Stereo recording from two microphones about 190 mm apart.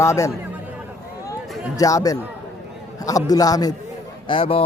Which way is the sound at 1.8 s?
20° left (ahead or behind).